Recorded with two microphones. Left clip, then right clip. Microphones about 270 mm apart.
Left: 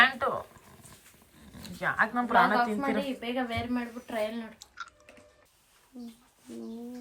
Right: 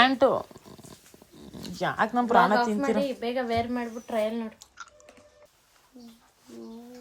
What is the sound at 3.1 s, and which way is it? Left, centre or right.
Speech, right.